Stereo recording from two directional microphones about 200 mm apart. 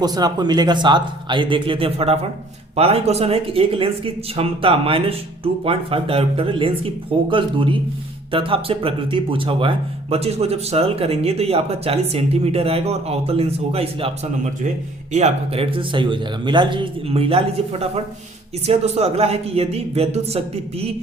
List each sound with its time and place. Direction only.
0.0 s speech: 20° right (ahead or behind)
15.1 s speech: 30° right (ahead or behind)